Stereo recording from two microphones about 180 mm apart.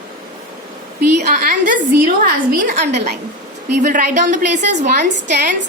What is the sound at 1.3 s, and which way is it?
A woman's voice, 50° right (ahead or behind).